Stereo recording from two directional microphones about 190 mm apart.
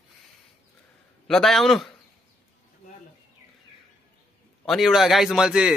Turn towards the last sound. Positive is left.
turn(degrees=-5)  # may be behind; listen again after turning